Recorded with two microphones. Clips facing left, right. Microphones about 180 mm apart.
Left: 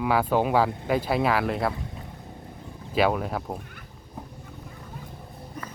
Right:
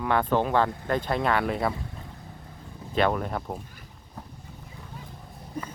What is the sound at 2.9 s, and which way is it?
Speech, 5° left (ahead or behind).